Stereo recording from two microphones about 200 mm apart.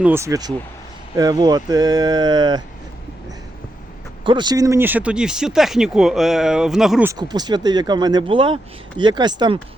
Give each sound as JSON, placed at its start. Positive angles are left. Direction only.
{"t": 0.0, "sound": "speech", "side_deg": -10}
{"t": 4.2, "sound": "speech", "side_deg": -25}
{"t": 7.1, "sound": "speech", "side_deg": -20}